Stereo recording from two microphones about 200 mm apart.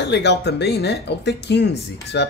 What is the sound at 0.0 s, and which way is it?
Speech, 60° left (ahead or behind).